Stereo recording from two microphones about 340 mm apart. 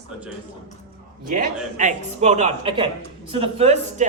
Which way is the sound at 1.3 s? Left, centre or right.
Right.